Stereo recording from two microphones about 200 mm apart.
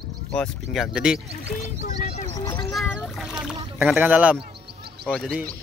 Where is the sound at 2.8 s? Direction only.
Centre (ahead or behind).